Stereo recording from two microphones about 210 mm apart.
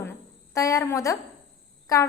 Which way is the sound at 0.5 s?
15° left (ahead or behind).